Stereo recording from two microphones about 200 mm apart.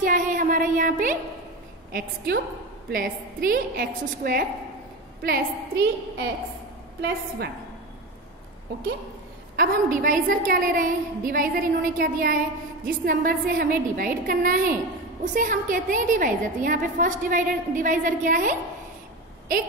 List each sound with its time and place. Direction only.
0.0 s a sound: 40° right (ahead or behind)
1.9 s a woman's voice: 50° right (ahead or behind)
9.6 s a woman's voice: 45° right (ahead or behind)